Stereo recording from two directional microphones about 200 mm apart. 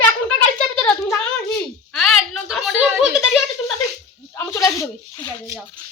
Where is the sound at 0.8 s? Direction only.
5° left (ahead or behind).